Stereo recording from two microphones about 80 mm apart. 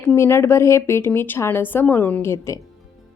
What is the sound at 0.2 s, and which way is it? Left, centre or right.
A woman's voice, left.